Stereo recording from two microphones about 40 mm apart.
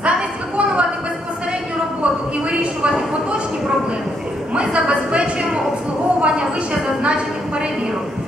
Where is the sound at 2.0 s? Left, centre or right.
Right.